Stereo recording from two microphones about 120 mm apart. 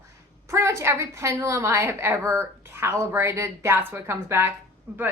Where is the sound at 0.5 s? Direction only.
20° right (ahead or behind).